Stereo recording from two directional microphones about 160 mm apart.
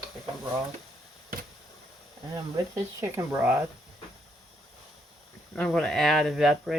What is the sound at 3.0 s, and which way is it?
Speech, 15° right (ahead or behind).